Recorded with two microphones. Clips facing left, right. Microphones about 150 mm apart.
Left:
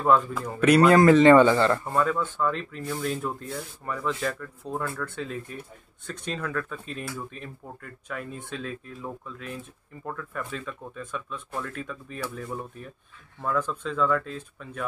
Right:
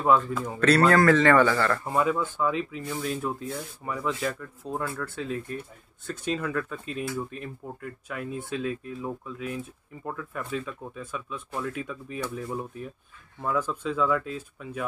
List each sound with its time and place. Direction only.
0.3 s speech: centre (ahead or behind)
0.6 s a man's voice: 15° left (ahead or behind)
1.9 s speech: 10° right (ahead or behind)